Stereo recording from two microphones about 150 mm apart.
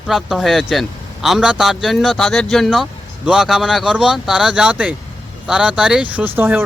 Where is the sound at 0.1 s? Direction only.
Centre (ahead or behind).